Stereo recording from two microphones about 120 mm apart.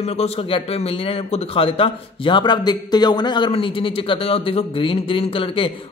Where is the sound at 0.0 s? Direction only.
55° left (ahead or behind).